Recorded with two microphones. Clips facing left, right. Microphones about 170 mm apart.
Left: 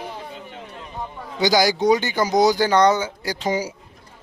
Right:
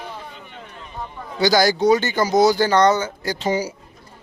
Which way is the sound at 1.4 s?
15° left (ahead or behind).